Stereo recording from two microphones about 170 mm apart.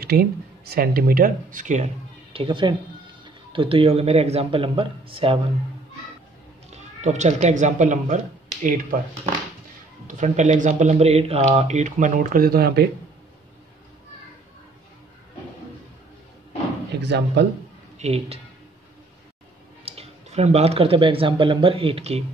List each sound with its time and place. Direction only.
0.0 s speech: 65° right (ahead or behind); by 1.9 s 45° right (ahead or behind)
2.3 s speech: 30° right (ahead or behind)
6.7 s speech: 45° right (ahead or behind)
10.0 s speech: 45° right (ahead or behind); by 12.8 s 65° right (ahead or behind)
17.0 s speech: 90° right
17.9 s speech: 40° right (ahead or behind)
19.8 s speech: 35° right (ahead or behind)